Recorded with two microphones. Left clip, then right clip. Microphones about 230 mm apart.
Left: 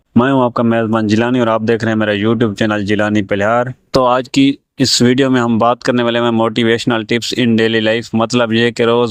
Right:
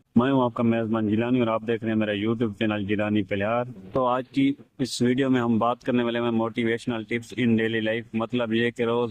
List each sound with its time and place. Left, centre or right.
0.2 s speech: left